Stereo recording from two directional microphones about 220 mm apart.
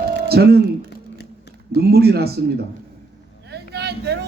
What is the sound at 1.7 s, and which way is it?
Speech, 45° right (ahead or behind).